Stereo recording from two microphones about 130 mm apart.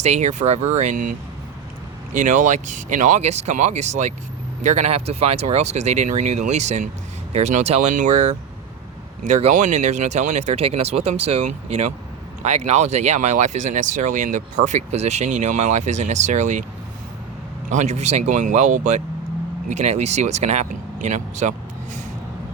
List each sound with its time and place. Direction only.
0.0 s speech: 60° right (ahead or behind); by 1.1 s 80° right
2.1 s speech: 75° right (ahead or behind)
17.7 s speech: 65° right (ahead or behind)